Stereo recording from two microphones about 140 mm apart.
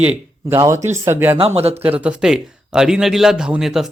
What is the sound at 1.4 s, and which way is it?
Speech, 45° right (ahead or behind).